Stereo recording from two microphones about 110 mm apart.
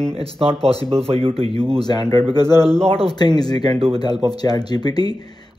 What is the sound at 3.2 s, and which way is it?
Speech, 40° left (ahead or behind).